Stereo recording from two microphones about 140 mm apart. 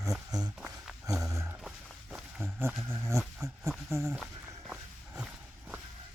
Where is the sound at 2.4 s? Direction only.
15° right (ahead or behind).